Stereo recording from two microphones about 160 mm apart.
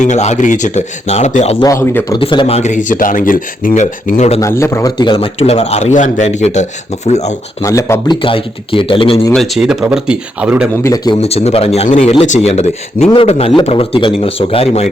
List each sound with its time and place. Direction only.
0.0 s speech: 45° left (ahead or behind)
1.6 s speech: 15° left (ahead or behind)
2.1 s speech: 30° left (ahead or behind)
2.6 s speech: 50° left (ahead or behind)
4.4 s speech: 15° left (ahead or behind)
5.4 s speech: 40° left (ahead or behind)
7.6 s speech: 20° left (ahead or behind)
9.3 s speech: centre (ahead or behind)
10.8 s speech: 25° left (ahead or behind)
11.2 s speech: 40° left (ahead or behind)